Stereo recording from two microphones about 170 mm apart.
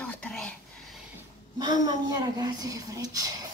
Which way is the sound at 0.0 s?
5° left (ahead or behind).